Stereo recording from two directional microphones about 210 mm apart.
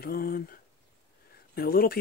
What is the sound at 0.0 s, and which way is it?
Speech, 45° left (ahead or behind).